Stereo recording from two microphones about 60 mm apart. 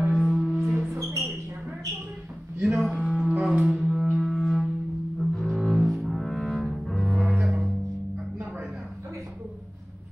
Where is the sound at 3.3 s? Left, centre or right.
Centre.